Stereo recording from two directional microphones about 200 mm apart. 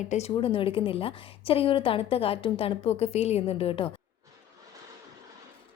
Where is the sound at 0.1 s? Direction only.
30° left (ahead or behind).